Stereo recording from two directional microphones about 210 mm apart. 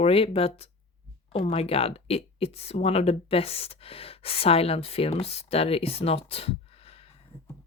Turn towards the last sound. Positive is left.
turn(degrees=25)  # may be behind; listen again after turning